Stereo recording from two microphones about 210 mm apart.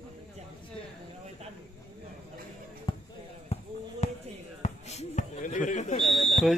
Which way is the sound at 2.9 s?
25° left (ahead or behind).